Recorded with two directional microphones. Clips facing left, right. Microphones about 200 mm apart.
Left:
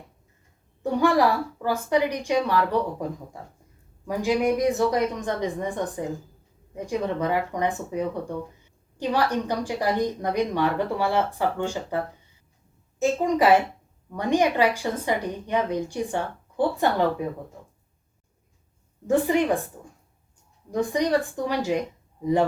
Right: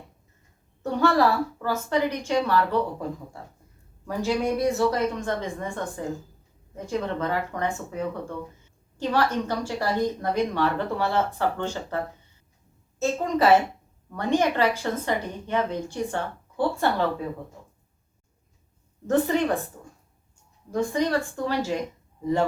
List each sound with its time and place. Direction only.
0.8 s a woman's voice: 15° left (ahead or behind)
4.0 s a woman's voice: 15° left (ahead or behind)
13.0 s a woman's voice: 15° left (ahead or behind)
19.0 s a woman's voice: 10° left (ahead or behind)
20.7 s a woman's voice: 15° left (ahead or behind)